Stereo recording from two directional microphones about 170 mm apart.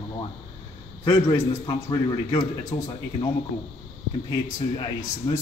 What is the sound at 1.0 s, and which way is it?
Speech, 15° left (ahead or behind).